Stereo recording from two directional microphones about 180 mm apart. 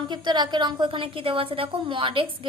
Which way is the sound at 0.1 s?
25° right (ahead or behind).